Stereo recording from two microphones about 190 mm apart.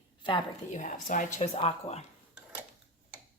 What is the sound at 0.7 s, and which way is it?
Speech, 40° left (ahead or behind).